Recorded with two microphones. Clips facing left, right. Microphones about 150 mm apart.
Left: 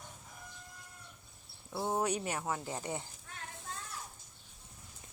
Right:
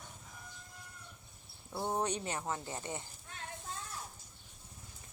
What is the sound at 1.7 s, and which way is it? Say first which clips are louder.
Speech: left 2 dB; 5° left (ahead or behind).